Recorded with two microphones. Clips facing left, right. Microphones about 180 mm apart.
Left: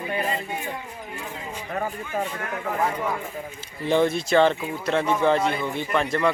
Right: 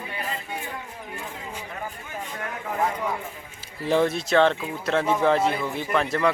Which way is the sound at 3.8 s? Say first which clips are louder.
Left 1 dB; centre (ahead or behind).